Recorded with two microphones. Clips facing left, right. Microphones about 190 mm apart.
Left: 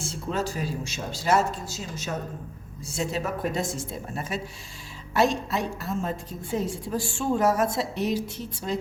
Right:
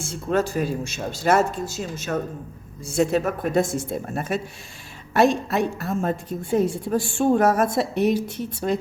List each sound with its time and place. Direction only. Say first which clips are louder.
0.1 s a woman's voice: right 8 dB; 55° right (ahead or behind)